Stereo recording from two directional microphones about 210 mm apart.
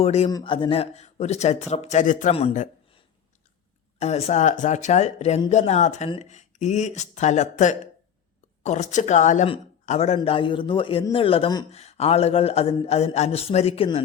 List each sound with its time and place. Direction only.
0.0 s speech: 30° left (ahead or behind)
4.0 s speech: 30° left (ahead or behind)